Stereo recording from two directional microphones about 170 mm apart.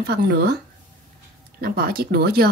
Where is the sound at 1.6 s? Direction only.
65° right (ahead or behind).